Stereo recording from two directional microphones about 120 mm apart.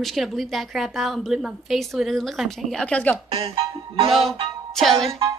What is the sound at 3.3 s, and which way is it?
Speech, 50° right (ahead or behind).